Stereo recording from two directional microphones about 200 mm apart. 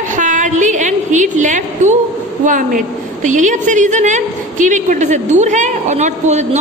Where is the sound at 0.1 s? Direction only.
40° right (ahead or behind).